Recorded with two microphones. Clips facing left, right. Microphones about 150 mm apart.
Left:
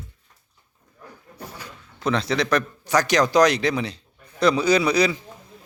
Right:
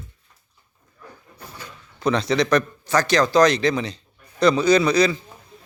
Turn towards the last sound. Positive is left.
turn(degrees=10)  # may be behind; listen again after turning